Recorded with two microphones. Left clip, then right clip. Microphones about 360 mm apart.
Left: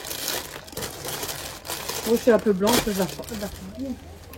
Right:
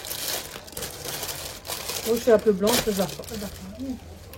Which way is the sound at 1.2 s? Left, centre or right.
Centre.